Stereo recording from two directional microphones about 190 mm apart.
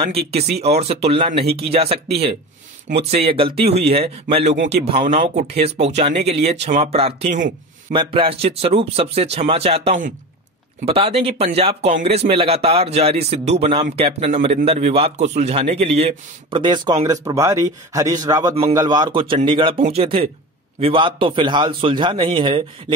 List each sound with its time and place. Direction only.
0.6 s a man's voice: 35° right (ahead or behind)